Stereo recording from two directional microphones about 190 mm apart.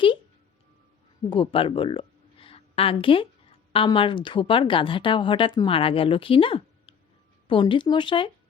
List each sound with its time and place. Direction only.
1.3 s a woman's voice: 25° left (ahead or behind)